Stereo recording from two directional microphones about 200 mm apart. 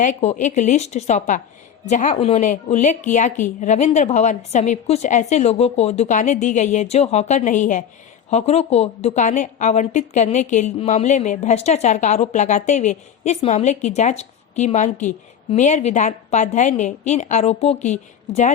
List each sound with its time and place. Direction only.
0.0 s a woman's voice: 35° left (ahead or behind)